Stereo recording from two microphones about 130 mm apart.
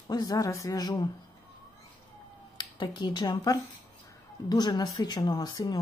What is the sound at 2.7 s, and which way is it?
Speech, 35° left (ahead or behind).